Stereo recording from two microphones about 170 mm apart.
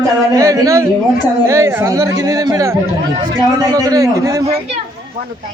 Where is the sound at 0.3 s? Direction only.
20° right (ahead or behind).